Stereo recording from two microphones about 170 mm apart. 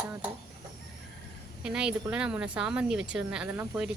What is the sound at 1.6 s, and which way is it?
Speech, 5° right (ahead or behind).